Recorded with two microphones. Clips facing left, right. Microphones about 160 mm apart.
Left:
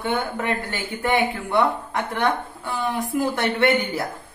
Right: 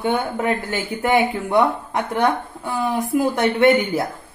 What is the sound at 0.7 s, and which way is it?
Speech, 20° right (ahead or behind).